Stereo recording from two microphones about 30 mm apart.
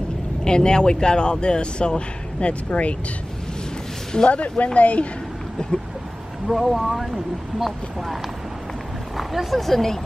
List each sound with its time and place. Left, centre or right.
0.4 s speech: left
4.3 s speech: left
5.6 s speech: left
6.4 s speech: centre